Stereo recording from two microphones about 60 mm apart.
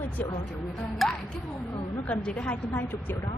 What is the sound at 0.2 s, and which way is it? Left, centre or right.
Speech, left.